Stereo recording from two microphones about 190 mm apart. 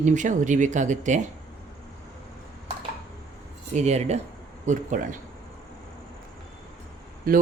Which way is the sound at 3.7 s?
35° right (ahead or behind).